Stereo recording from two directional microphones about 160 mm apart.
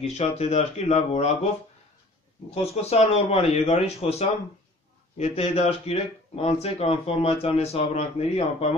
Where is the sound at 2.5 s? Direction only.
40° left (ahead or behind).